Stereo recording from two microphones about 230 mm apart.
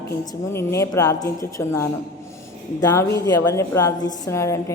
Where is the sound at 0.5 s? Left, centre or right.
Centre.